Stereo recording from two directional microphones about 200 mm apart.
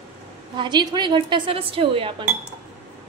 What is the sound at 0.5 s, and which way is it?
Speech, 20° right (ahead or behind).